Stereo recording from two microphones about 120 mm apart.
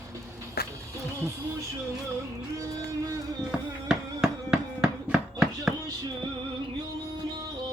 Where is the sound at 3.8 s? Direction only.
5° right (ahead or behind).